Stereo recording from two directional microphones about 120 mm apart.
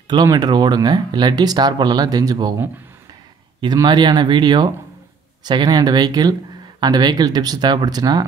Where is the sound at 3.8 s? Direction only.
40° right (ahead or behind).